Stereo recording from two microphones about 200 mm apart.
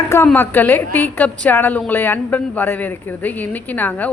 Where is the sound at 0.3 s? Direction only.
10° left (ahead or behind).